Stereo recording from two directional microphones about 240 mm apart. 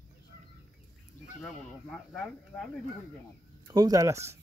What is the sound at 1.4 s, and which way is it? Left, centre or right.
Speech, centre.